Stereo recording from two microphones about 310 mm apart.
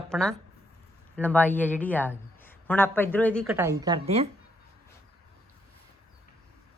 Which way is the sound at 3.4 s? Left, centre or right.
Centre.